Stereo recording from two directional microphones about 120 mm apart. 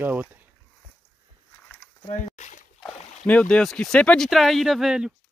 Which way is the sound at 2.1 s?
85° left.